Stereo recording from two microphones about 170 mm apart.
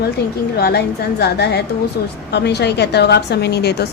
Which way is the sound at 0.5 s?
70° left (ahead or behind).